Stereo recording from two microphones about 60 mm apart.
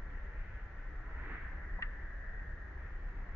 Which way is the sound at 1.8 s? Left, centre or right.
Left.